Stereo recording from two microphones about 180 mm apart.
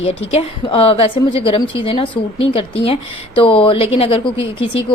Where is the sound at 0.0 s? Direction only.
35° left (ahead or behind).